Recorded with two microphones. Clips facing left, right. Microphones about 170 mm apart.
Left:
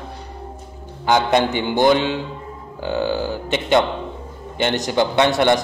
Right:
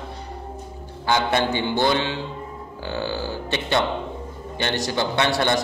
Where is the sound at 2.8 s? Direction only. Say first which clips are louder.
Left 6 dB; 15° left (ahead or behind).